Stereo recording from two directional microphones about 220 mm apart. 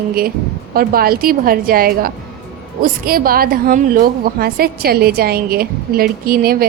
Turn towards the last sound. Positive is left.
turn(degrees=-40)  # may be behind; listen again after turning